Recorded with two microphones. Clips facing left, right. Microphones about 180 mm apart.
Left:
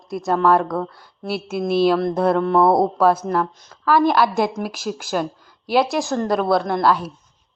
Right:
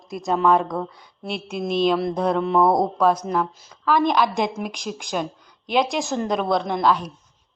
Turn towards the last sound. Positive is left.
turn(degrees=5)  # may be behind; listen again after turning